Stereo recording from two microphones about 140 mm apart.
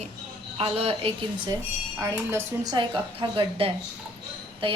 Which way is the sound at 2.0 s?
20° right (ahead or behind).